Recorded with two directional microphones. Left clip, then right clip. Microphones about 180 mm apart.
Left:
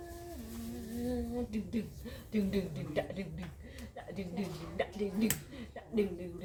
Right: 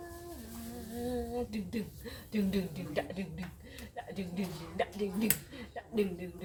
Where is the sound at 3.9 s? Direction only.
15° right (ahead or behind).